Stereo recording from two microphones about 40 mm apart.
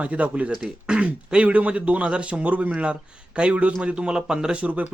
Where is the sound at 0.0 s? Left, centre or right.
Right.